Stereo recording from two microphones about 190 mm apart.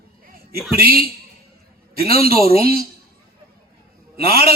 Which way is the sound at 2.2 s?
50° right (ahead or behind).